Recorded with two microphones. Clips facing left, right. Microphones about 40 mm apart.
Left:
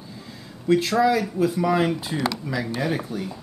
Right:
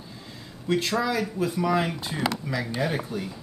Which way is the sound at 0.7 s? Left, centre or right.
Centre.